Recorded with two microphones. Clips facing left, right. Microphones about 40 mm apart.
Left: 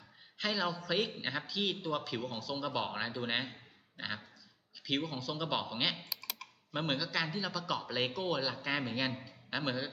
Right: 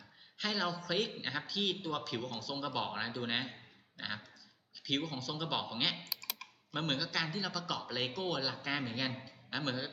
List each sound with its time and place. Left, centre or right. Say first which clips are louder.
0.3 s a man's voice: left 1 dB; centre
4.9 s a man's voice: left 1 dB; centre